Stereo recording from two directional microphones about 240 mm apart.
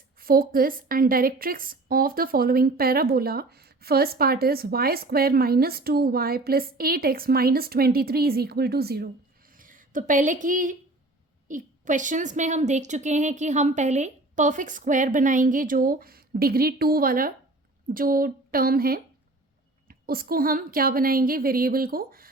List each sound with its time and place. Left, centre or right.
0.2 s a woman's voice: right